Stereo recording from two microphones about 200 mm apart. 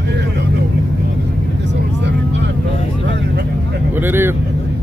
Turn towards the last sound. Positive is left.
turn(degrees=-10)  # may be behind; listen again after turning